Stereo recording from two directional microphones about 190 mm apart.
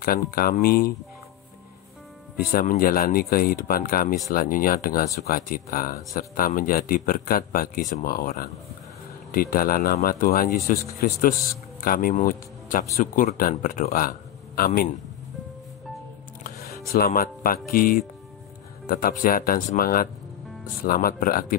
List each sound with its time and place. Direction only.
0.0 s speech: 50° left (ahead or behind)
2.3 s speech: 50° left (ahead or behind)
16.9 s speech: 50° left (ahead or behind)